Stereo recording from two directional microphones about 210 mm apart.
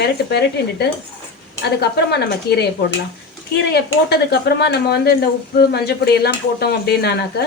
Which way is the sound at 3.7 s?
50° left (ahead or behind).